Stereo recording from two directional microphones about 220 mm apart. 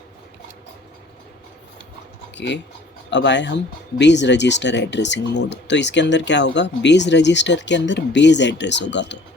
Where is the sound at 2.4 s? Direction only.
50° left (ahead or behind).